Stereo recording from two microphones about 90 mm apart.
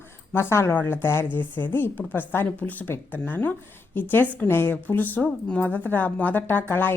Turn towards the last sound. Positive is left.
turn(degrees=20)  # may be behind; listen again after turning